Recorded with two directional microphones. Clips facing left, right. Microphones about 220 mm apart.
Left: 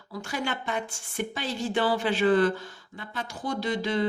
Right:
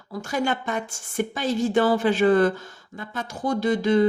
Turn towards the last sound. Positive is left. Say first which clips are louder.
# right 7 dB
turn(degrees=-45)  # may be behind; listen again after turning